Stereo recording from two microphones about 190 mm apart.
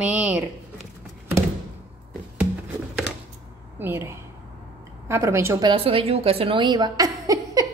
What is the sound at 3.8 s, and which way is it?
A woman's voice, 10° right (ahead or behind).